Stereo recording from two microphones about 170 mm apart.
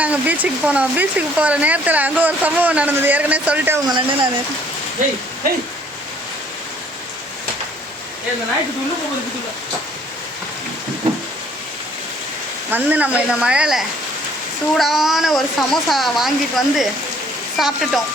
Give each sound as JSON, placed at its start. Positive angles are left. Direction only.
{"t": 0.0, "sound": "speech", "side_deg": -10}
{"t": 3.8, "sound": "speech", "side_deg": -25}
{"t": 12.7, "sound": "speech", "side_deg": -10}